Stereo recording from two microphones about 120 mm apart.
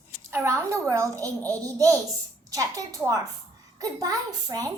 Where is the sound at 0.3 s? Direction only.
20° right (ahead or behind).